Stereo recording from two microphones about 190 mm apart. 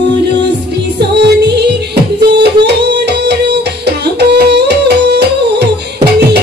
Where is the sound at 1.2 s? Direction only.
60° right (ahead or behind).